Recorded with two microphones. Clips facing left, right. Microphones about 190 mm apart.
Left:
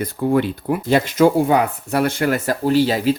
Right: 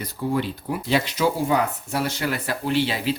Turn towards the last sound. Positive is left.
turn(degrees=40)  # may be behind; listen again after turning